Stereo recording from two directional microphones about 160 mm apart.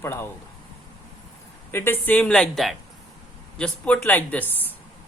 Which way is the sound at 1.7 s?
15° left (ahead or behind).